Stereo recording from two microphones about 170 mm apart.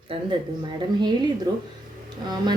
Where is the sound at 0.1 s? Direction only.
35° right (ahead or behind).